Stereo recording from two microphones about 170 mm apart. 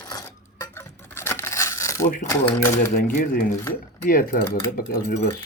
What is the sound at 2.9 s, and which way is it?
Cutlery, 55° left (ahead or behind).